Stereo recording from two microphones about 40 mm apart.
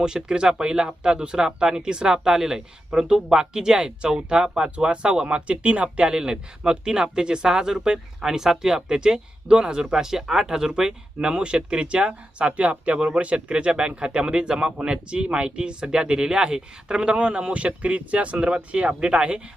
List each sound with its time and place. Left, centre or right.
0.0 s speech: centre
6.1 s speech: centre